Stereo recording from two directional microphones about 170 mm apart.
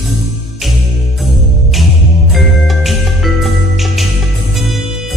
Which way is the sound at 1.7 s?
Centre (ahead or behind).